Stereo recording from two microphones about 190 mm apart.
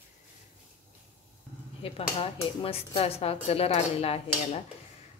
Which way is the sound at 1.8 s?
30° left (ahead or behind).